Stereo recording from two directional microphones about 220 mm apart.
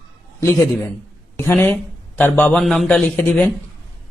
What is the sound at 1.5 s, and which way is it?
Speech, 10° left (ahead or behind).